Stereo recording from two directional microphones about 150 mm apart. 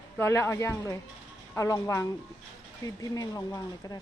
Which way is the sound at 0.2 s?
15° left (ahead or behind).